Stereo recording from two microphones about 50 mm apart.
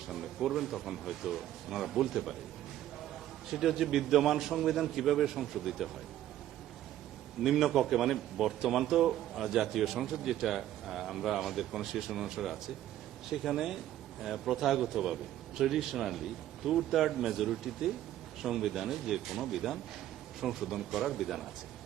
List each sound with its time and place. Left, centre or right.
0.1 s a man's voice: centre
3.5 s a man's voice: centre
7.4 s a man's voice: centre